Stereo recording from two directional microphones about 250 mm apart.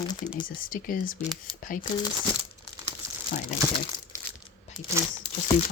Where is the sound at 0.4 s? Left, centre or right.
Left.